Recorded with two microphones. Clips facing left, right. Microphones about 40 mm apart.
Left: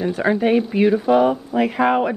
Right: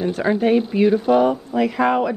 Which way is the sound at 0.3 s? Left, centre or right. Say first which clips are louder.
Even; centre.